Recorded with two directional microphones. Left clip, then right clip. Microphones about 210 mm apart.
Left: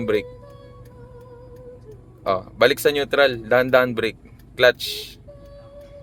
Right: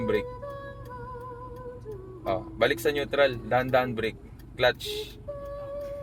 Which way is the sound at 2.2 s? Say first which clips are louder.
Left 8 dB; 45° left (ahead or behind).